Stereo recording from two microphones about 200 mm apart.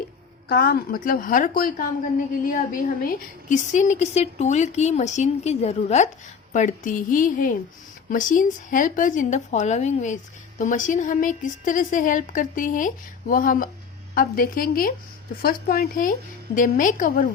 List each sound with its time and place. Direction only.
0.4 s a woman's voice: 50° left (ahead or behind)